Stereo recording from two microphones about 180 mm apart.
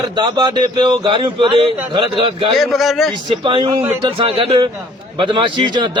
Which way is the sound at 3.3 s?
30° right (ahead or behind).